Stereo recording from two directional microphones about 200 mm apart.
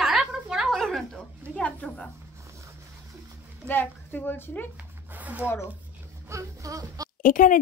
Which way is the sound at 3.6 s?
10° left (ahead or behind).